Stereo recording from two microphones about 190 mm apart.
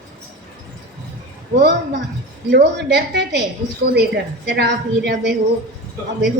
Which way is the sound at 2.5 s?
60° right (ahead or behind).